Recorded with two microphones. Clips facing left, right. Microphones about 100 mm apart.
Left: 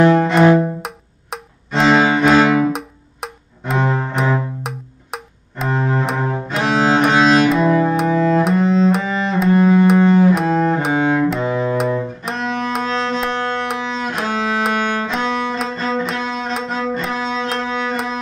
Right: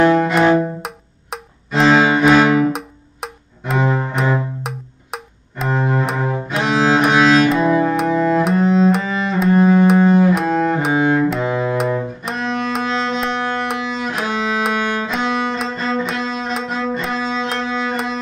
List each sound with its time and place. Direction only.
0.2 s music: centre (ahead or behind)
2.7 s cello: centre (ahead or behind)
11.2 s bowed string instrument: centre (ahead or behind)
13.5 s music: 5° right (ahead or behind)